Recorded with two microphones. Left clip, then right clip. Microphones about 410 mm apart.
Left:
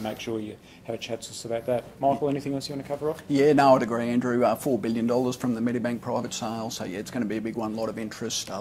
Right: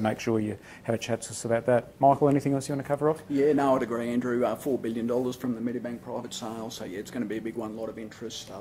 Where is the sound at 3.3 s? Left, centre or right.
Left.